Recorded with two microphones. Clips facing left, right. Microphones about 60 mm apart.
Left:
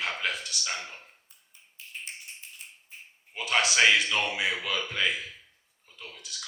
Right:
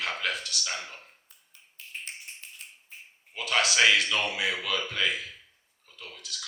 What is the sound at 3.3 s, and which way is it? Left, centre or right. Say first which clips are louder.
Speech: even; left.